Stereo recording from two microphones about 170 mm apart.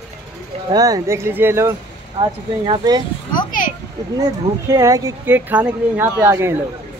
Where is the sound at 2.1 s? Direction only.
30° right (ahead or behind).